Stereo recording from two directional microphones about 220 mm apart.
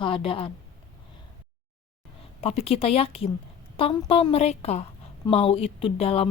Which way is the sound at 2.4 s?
25° left (ahead or behind).